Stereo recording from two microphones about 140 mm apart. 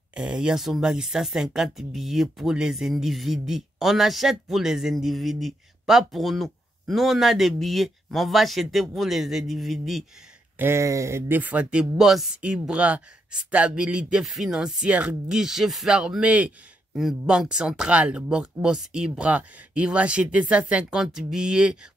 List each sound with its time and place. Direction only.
0.1 s speech: 5° right (ahead or behind)
10.6 s speech: 20° right (ahead or behind)